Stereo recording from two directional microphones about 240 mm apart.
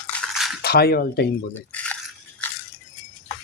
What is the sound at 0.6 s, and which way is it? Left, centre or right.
Speech, left.